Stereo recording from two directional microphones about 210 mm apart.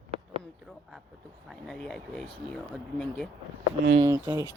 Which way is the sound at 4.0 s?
15° right (ahead or behind).